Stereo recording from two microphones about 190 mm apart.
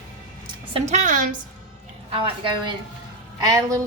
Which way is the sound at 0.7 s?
35° right (ahead or behind).